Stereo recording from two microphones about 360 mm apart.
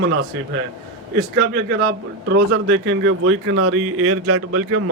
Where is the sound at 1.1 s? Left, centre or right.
Right.